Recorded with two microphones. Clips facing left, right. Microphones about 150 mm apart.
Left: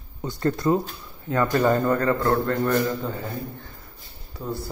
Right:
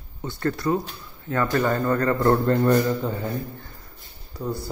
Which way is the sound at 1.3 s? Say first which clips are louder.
Left 2 dB; 10° left (ahead or behind).